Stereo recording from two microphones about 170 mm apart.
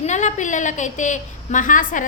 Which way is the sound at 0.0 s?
45° left (ahead or behind).